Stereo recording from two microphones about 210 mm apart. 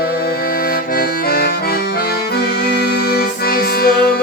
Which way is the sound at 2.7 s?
50° left (ahead or behind).